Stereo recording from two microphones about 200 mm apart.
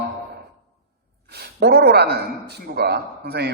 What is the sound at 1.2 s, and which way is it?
A man's voice, 55° right (ahead or behind).